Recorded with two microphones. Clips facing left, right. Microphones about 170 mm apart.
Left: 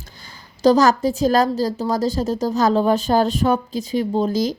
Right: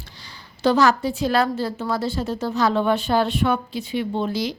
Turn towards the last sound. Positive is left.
turn(degrees=45)  # may be behind; listen again after turning